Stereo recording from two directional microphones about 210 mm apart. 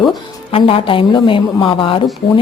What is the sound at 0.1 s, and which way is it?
A woman's voice, 25° left (ahead or behind).